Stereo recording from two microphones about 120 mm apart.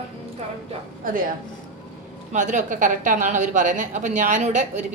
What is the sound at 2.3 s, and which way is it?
A woman's voice, 90° right.